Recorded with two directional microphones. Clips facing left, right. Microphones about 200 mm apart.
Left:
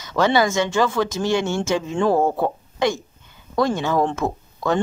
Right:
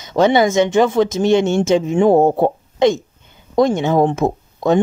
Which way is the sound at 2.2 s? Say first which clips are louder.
Right 6 dB; 30° right (ahead or behind).